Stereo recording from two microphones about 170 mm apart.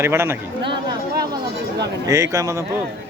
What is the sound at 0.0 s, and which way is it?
Speech, 15° right (ahead or behind).